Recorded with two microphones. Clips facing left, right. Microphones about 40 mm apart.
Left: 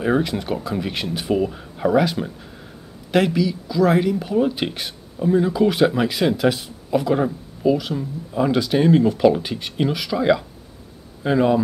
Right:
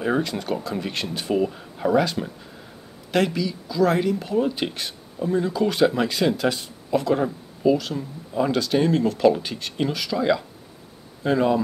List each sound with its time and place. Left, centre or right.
0.0 s speech: centre